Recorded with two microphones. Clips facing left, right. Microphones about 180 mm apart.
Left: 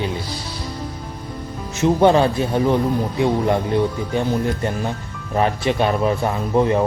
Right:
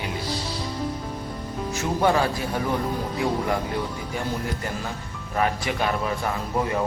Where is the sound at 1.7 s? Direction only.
25° left (ahead or behind).